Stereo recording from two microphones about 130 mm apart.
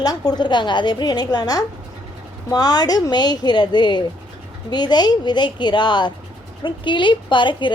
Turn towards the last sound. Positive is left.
turn(degrees=40)  # may be behind; listen again after turning